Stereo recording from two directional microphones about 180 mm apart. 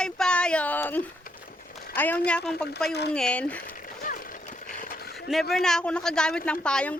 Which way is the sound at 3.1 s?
5° left (ahead or behind).